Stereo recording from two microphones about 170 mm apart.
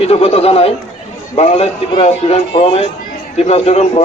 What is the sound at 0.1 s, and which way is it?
A man's voice, 35° left (ahead or behind).